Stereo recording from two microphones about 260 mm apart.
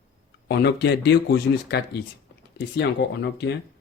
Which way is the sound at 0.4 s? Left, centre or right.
Left.